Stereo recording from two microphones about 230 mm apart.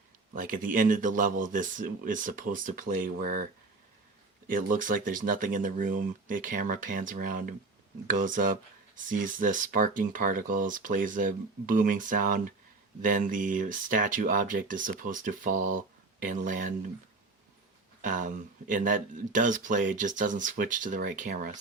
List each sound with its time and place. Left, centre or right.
0.3 s speech: right
4.4 s speech: right
18.0 s speech: right